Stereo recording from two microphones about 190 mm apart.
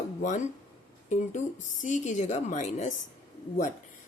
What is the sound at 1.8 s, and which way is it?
Speech, 40° left (ahead or behind).